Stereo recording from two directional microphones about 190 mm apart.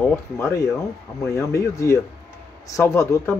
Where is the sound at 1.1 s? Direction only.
15° left (ahead or behind).